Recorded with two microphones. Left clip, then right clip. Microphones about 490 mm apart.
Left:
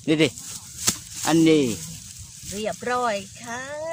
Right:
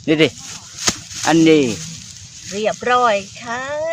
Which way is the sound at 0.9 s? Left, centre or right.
Right.